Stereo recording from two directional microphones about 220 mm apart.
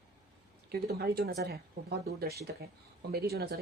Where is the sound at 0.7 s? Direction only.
45° right (ahead or behind).